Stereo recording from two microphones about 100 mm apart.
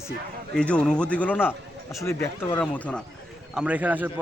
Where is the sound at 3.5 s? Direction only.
15° right (ahead or behind).